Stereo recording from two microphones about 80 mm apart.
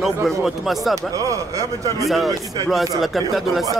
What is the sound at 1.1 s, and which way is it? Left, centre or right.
Speech, right.